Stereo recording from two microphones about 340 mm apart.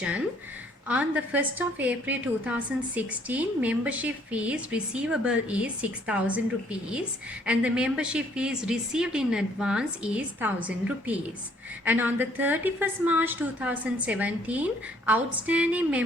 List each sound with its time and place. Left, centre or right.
0.9 s a woman's voice: centre